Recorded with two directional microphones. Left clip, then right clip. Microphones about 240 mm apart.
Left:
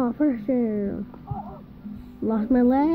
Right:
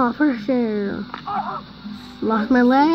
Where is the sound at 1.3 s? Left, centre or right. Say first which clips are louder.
Right 14 dB; right.